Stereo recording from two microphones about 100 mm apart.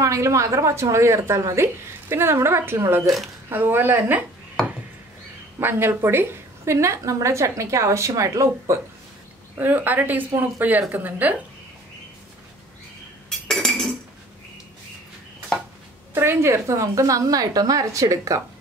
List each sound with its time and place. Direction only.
0.0 s a woman's voice: 30° right (ahead or behind)
5.6 s a woman's voice: 20° right (ahead or behind)
9.6 s a woman's voice: 20° right (ahead or behind)
13.3 s cutlery: 5° left (ahead or behind)
16.2 s a woman's voice: 25° right (ahead or behind)